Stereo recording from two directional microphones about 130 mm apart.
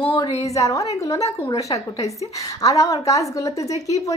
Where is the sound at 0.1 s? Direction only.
30° left (ahead or behind).